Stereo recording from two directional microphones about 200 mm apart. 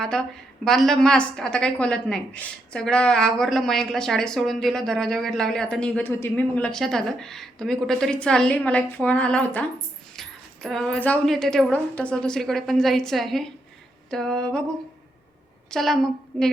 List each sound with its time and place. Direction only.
0.0 s a woman's voice: 5° left (ahead or behind)
15.7 s a woman's voice: centre (ahead or behind)